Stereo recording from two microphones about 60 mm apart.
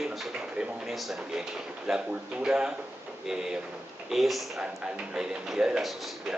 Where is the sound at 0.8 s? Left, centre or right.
Centre.